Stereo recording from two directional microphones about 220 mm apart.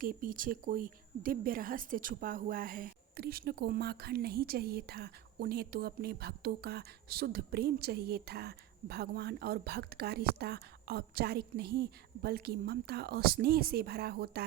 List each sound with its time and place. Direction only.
0.0 s speech: 40° right (ahead or behind)